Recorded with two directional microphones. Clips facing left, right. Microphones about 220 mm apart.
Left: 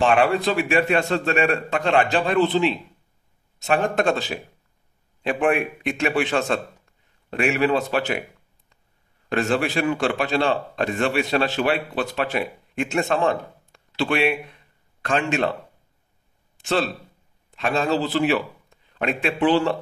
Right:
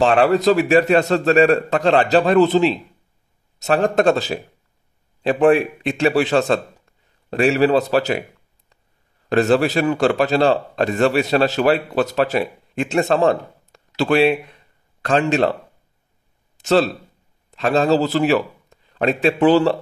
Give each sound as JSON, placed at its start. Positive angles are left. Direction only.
{"t": 0.0, "sound": "a man's voice", "side_deg": -35}
{"t": 9.3, "sound": "a man's voice", "side_deg": -40}
{"t": 16.5, "sound": "a man's voice", "side_deg": -40}